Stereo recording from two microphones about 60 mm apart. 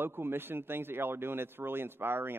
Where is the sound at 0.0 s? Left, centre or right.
Right.